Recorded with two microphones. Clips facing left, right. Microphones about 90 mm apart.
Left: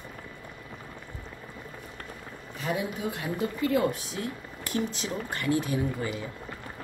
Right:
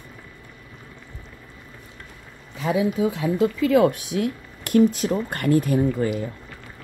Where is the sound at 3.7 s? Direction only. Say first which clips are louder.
Right 8 dB; 75° right (ahead or behind); by 6.3 s 50° right (ahead or behind).